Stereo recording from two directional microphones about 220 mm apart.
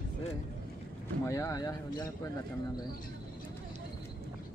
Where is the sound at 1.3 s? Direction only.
15° left (ahead or behind).